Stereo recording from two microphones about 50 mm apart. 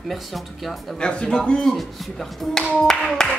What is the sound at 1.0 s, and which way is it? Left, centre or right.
Speech, left.